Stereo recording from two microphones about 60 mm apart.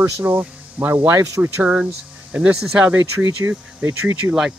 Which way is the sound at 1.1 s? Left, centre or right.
Right.